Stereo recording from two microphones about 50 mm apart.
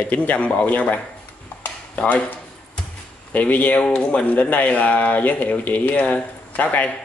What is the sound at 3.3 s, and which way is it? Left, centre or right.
Speech, left.